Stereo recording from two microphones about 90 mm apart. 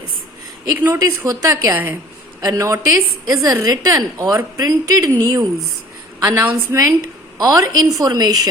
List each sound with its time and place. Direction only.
0.9 s a woman's voice: 40° right (ahead or behind)
6.2 s a woman's voice: 20° right (ahead or behind)
6.7 s a woman's voice: 35° right (ahead or behind)